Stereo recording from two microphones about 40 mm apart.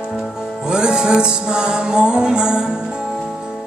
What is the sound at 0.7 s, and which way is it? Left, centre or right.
Music, centre.